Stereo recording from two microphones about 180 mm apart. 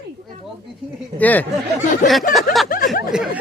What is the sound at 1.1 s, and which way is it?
Speech, 10° left (ahead or behind).